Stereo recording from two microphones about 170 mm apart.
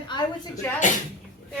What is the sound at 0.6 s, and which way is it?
Speech, 10° left (ahead or behind).